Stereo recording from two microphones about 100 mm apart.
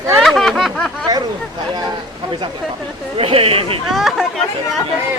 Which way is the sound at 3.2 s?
70° right (ahead or behind).